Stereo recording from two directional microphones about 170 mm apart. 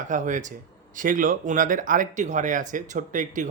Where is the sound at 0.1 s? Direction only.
50° right (ahead or behind).